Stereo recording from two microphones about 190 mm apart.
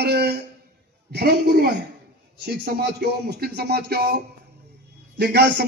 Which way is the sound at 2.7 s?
55° right (ahead or behind).